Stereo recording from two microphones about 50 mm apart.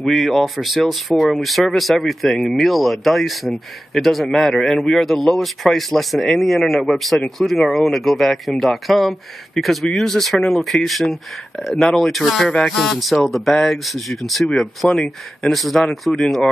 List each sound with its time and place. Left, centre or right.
0.1 s speech: centre
14.8 s speech: centre
15.4 s speech: centre